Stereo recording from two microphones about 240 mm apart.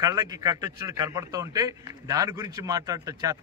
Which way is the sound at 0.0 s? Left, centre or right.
Centre.